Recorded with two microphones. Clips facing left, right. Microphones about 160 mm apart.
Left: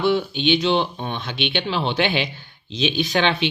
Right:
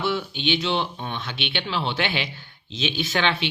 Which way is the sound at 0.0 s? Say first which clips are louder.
Left 6 dB; 20° left (ahead or behind).